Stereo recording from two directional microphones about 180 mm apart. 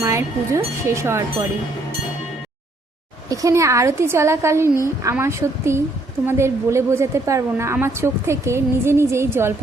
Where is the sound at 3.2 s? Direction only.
20° right (ahead or behind).